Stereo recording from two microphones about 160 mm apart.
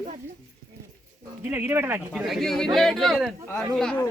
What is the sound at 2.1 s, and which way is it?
Speech, centre (ahead or behind).